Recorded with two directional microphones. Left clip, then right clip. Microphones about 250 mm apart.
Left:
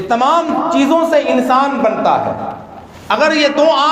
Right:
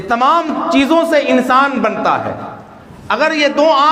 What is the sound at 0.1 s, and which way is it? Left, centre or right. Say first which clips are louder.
A man's voice: even; right.